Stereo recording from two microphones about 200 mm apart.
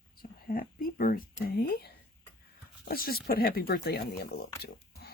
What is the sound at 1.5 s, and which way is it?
Speech, 50° left (ahead or behind).